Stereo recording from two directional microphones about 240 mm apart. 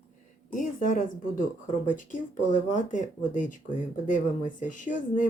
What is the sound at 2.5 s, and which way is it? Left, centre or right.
Speech, left.